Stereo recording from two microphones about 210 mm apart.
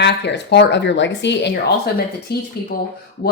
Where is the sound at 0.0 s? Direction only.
55° left (ahead or behind).